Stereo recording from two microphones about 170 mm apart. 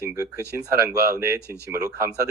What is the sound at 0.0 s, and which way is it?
Speech, 20° right (ahead or behind).